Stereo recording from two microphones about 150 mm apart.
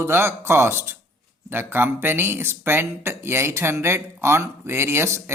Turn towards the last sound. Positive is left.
turn(degrees=-15)  # may be behind; listen again after turning